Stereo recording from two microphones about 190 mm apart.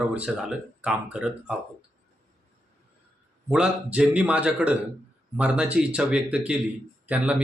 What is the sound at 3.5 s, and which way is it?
Speech, 5° right (ahead or behind).